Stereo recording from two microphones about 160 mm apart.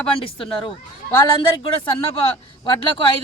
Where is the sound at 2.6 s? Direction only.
30° left (ahead or behind).